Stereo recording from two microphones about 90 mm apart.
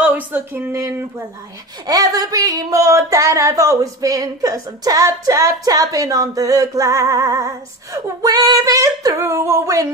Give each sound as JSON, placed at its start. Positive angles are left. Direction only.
{"t": 0.0, "sound": "speech", "side_deg": -20}
{"t": 1.9, "sound": "speech", "side_deg": -45}